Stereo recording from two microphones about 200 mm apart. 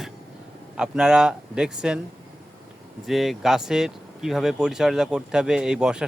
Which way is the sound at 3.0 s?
Centre (ahead or behind).